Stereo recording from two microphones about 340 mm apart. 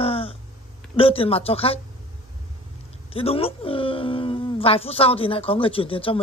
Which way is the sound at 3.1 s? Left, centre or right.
Centre.